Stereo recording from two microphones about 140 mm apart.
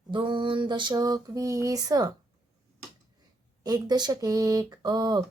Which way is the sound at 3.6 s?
30° right (ahead or behind).